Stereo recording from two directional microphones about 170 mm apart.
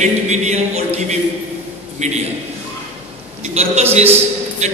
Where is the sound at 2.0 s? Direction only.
40° right (ahead or behind).